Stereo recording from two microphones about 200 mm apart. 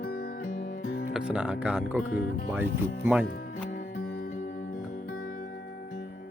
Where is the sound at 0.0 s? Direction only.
50° left (ahead or behind).